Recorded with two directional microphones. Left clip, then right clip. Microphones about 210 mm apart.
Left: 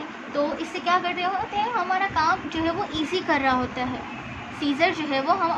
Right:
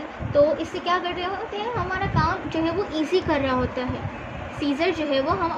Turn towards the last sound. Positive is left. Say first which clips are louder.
# even
turn(degrees=-5)  # may be behind; listen again after turning